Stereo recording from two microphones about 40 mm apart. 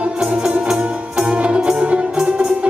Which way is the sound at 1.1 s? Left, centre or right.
Centre.